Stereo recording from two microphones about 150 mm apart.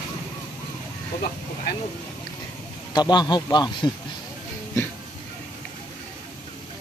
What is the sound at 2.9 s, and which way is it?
Speech, 30° left (ahead or behind).